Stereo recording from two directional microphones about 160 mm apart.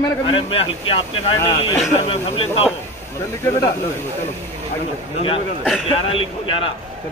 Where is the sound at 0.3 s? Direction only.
35° left (ahead or behind).